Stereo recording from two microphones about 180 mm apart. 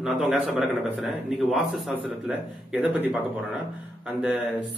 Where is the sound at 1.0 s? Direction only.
Centre (ahead or behind).